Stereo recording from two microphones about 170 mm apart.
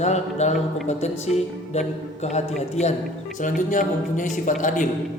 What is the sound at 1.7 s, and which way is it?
A man's voice, 40° left (ahead or behind).